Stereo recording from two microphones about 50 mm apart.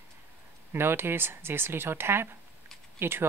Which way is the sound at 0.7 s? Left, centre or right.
Right.